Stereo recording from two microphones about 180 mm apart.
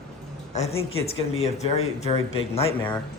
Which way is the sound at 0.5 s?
35° left (ahead or behind).